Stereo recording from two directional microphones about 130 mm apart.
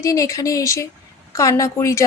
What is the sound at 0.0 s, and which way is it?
A woman's voice, 25° left (ahead or behind).